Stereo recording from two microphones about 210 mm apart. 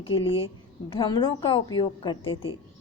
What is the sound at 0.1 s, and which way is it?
A woman's voice, 25° left (ahead or behind).